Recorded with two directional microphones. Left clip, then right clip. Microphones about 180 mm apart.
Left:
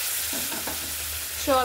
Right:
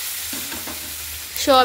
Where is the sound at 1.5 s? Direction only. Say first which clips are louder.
Right 8 dB; 50° right (ahead or behind).